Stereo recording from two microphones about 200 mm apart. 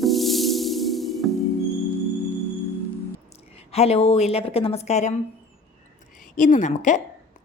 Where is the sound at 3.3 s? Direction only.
30° left (ahead or behind).